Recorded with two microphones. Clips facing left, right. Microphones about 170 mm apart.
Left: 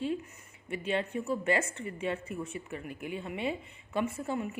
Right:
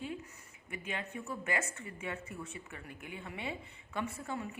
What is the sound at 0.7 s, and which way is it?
Speech, 25° left (ahead or behind).